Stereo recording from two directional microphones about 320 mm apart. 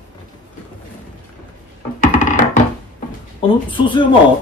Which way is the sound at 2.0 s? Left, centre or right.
Left.